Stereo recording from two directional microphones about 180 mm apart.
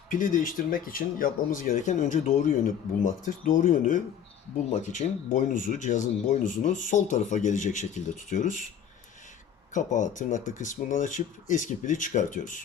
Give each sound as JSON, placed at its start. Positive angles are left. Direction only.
{"t": 0.1, "sound": "speech", "side_deg": 45}
{"t": 9.7, "sound": "speech", "side_deg": 45}